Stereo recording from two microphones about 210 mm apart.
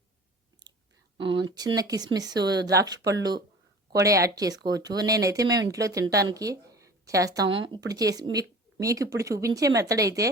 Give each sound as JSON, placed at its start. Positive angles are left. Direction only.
{"t": 0.6, "sound": "chewing", "side_deg": -20}
{"t": 1.2, "sound": "speech", "side_deg": -25}